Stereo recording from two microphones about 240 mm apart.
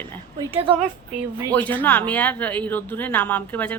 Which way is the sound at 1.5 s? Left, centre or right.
Centre.